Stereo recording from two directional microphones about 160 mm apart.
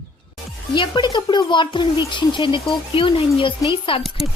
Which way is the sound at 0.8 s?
30° left (ahead or behind).